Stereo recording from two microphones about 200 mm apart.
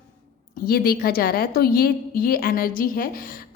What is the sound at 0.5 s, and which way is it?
A woman's voice, 50° left (ahead or behind).